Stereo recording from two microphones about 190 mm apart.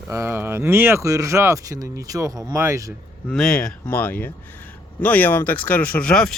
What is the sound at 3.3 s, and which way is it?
Speech, 5° left (ahead or behind).